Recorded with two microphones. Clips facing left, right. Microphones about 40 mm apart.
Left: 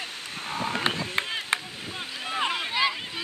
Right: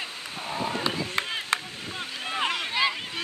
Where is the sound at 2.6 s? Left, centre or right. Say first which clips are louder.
Even; centre.